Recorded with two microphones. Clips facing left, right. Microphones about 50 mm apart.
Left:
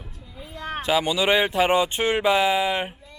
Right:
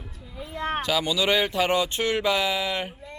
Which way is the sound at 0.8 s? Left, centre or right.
Left.